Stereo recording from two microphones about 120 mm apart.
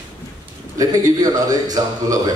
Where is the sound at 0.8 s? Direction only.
30° right (ahead or behind).